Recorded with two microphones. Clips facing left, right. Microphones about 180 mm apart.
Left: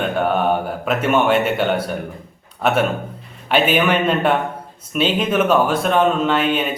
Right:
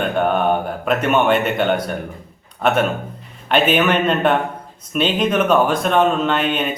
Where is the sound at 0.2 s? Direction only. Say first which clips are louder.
Right 1 dB; 5° left (ahead or behind).